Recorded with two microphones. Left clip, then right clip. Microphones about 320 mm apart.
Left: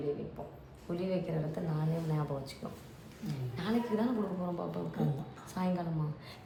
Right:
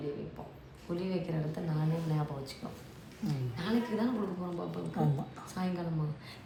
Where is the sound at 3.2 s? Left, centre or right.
Centre.